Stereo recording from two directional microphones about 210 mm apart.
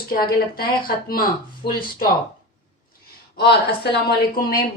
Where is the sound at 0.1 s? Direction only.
45° left (ahead or behind).